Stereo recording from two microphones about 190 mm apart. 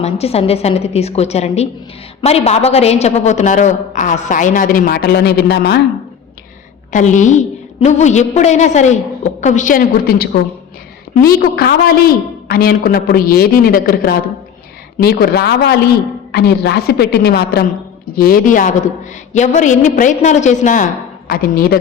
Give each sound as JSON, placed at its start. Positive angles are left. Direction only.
{"t": 0.0, "sound": "a woman's voice", "side_deg": 30}
{"t": 6.9, "sound": "a woman's voice", "side_deg": 40}
{"t": 11.3, "sound": "a man's voice", "side_deg": 55}
{"t": 21.2, "sound": "a man's voice", "side_deg": 50}